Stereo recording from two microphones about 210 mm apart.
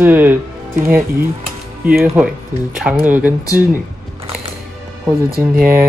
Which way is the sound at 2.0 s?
10° right (ahead or behind).